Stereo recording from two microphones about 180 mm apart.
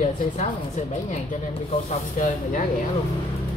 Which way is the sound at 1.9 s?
45° left (ahead or behind).